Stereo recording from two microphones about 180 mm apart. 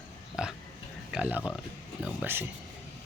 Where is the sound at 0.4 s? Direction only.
5° right (ahead or behind).